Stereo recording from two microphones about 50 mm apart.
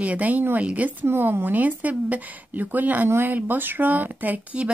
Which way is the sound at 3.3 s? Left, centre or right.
Right.